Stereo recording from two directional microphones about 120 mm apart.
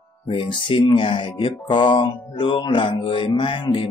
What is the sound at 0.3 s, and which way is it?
Music, 45° left (ahead or behind).